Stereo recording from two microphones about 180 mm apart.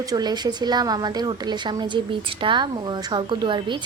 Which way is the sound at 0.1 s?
25° right (ahead or behind).